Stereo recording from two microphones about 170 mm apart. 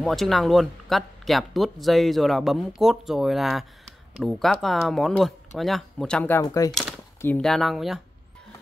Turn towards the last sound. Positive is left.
turn(degrees=0)  # may be behind; listen again after turning